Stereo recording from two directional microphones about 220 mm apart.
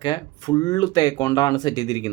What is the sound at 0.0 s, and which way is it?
Speech, 20° left (ahead or behind).